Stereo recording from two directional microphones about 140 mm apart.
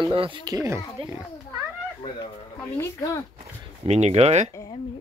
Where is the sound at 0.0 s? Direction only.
40° right (ahead or behind).